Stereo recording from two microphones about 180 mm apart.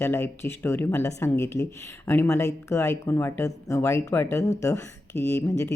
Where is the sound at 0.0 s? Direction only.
15° left (ahead or behind).